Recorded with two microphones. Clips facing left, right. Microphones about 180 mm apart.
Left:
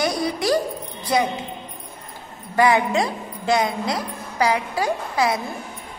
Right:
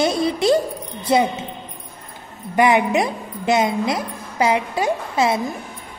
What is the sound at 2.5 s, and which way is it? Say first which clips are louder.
A woman's voice: right 2 dB; 20° right (ahead or behind).